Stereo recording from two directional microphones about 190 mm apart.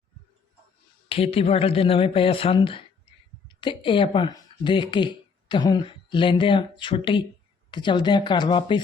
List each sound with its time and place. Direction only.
1.0 s speech: 30° left (ahead or behind)